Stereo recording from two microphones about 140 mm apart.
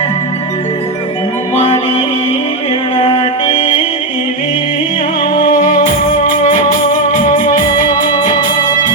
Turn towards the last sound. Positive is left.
turn(degrees=70)  # may be behind; listen again after turning